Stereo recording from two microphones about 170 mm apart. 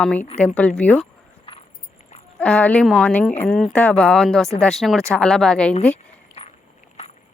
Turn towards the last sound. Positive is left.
turn(degrees=40)  # may be behind; listen again after turning